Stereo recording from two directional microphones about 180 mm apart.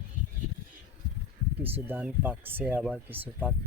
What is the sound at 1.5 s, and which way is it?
Speech, 10° right (ahead or behind).